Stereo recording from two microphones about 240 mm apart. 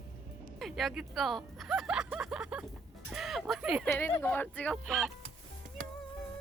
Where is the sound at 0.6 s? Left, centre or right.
Centre.